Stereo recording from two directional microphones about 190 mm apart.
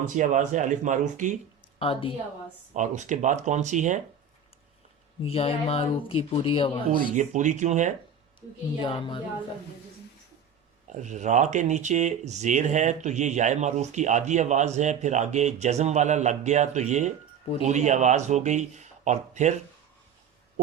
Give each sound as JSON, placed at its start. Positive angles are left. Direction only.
{"t": 0.2, "sound": "speech", "side_deg": -40}
{"t": 1.8, "sound": "speech", "side_deg": 30}
{"t": 2.7, "sound": "speech", "side_deg": -40}
{"t": 5.2, "sound": "speech", "side_deg": 30}
{"t": 7.0, "sound": "speech", "side_deg": -40}
{"t": 8.4, "sound": "speech", "side_deg": 25}
{"t": 10.8, "sound": "speech", "side_deg": -40}